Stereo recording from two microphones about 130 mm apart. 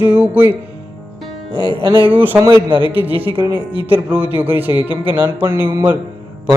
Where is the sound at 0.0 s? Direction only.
15° right (ahead or behind).